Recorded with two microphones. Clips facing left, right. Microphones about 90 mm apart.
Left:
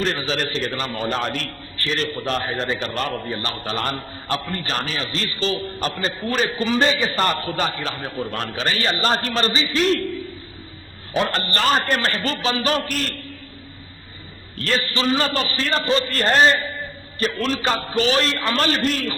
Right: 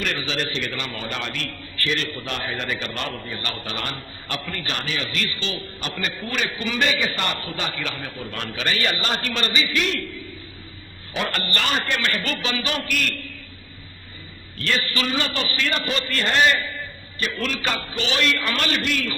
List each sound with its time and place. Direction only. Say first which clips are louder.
0.0 s a man's voice: left 3 dB; 35° left (ahead or behind)
11.1 s a man's voice: left 4 dB; 30° left (ahead or behind)
14.6 s a man's voice: left 3 dB; 35° left (ahead or behind)